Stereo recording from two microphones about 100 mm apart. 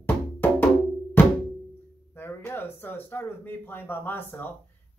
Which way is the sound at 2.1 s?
20° left (ahead or behind).